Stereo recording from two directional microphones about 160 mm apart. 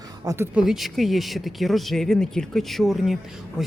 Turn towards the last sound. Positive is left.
turn(degrees=0)  # may be behind; listen again after turning